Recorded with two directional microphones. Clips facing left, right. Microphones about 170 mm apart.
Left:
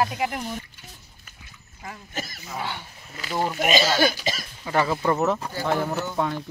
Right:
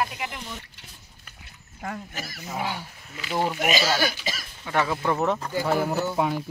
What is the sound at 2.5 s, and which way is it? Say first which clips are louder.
Speech: right 2 dB; 10° right (ahead or behind).